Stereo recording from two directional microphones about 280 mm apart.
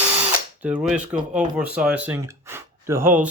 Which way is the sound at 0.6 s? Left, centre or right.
Centre.